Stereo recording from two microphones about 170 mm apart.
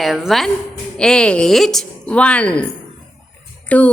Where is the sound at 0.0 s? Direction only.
Centre (ahead or behind).